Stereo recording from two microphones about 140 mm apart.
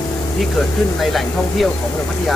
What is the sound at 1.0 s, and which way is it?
Speech, centre (ahead or behind).